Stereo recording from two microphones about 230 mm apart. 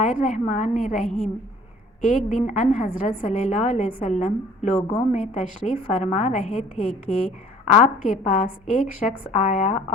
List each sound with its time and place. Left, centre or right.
0.0 s a woman's voice: left